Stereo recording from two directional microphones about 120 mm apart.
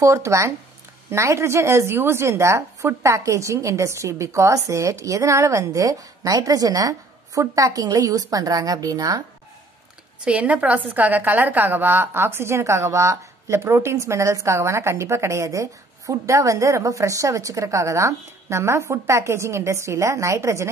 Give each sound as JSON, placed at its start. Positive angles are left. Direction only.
{"t": 0.0, "sound": "a woman's voice", "side_deg": -25}
{"t": 10.2, "sound": "a woman's voice", "side_deg": -10}